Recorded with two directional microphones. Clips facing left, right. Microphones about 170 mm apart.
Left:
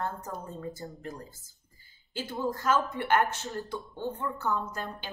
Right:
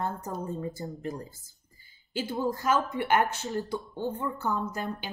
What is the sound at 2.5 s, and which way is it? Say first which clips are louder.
Speech: left 2 dB; 15° right (ahead or behind).